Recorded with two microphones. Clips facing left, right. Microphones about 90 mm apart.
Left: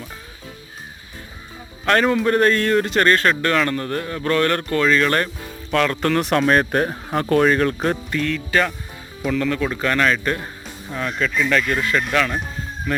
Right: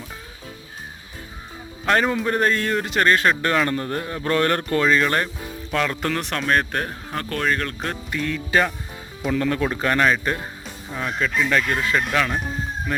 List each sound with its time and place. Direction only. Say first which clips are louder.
1.8 s a man's voice: left 3 dB; 5° right (ahead or behind); by 4.9 s 25° right (ahead or behind)
4.9 s speech: left 2 dB; 10° right (ahead or behind); by 7.9 s 10° left (ahead or behind)
8.1 s a man's voice: left 1 dB; 15° right (ahead or behind)
9.3 s a man's voice: even; 25° right (ahead or behind)
10.9 s a man's voice: left 1 dB; 10° right (ahead or behind)